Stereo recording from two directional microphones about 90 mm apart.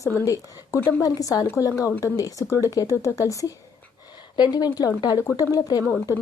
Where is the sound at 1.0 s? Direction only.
45° left (ahead or behind).